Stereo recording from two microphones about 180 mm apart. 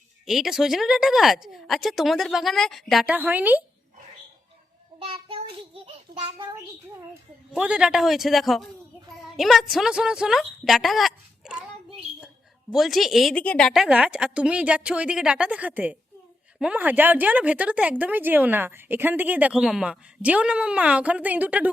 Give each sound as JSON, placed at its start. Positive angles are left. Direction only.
{"t": 0.3, "sound": "speech", "side_deg": 0}
{"t": 4.9, "sound": "child singing", "side_deg": -30}
{"t": 7.5, "sound": "a woman's voice", "side_deg": -5}
{"t": 12.7, "sound": "a woman's voice", "side_deg": 0}